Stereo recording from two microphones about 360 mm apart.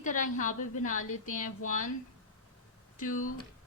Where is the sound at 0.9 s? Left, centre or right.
Left.